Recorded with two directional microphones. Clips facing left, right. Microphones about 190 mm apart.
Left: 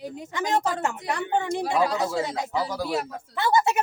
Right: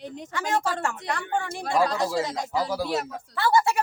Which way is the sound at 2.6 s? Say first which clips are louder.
Right 1 dB; 5° right (ahead or behind).